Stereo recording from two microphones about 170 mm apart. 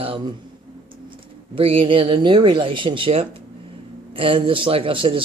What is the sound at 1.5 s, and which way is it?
Speech, 30° right (ahead or behind).